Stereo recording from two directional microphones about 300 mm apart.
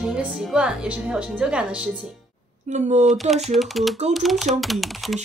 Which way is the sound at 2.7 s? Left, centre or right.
Right.